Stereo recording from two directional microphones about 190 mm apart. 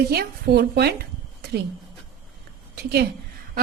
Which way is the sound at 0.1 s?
55° right (ahead or behind).